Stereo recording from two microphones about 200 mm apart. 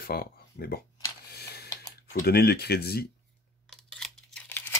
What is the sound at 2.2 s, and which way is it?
Speech, 50° left (ahead or behind).